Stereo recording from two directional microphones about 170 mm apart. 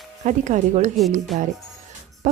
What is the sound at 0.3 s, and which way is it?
Speech, 45° right (ahead or behind).